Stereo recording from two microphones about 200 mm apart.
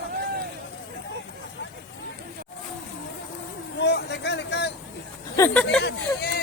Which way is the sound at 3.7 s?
60° left (ahead or behind).